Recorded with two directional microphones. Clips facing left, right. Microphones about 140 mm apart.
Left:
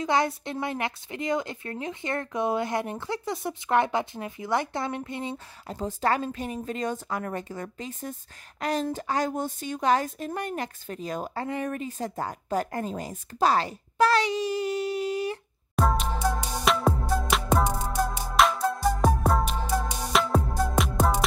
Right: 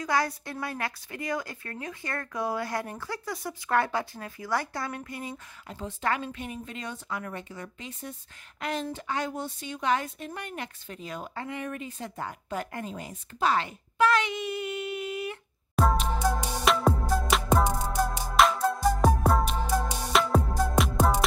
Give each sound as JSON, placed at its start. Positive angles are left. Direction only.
{"t": 0.0, "sound": "a woman's voice", "side_deg": 20}
{"t": 5.8, "sound": "a woman's voice", "side_deg": 40}
{"t": 15.7, "sound": "music", "side_deg": 0}